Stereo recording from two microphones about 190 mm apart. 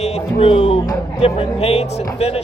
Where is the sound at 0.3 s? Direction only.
30° left (ahead or behind).